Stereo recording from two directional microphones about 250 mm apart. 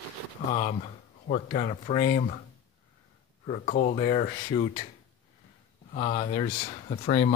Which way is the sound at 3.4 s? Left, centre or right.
Left.